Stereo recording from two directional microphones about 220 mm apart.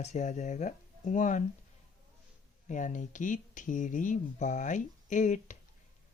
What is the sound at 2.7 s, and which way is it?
Speech, 35° left (ahead or behind).